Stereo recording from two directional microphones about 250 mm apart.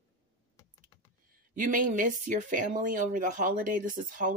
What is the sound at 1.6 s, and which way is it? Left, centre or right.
Speech, right.